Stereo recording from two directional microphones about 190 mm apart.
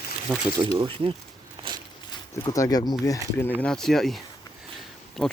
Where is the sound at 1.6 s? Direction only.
25° right (ahead or behind).